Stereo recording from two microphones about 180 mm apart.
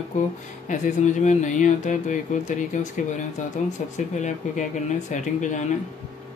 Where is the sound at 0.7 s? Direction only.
45° left (ahead or behind).